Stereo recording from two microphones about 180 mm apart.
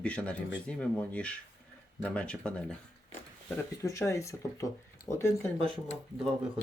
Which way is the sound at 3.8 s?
15° left (ahead or behind).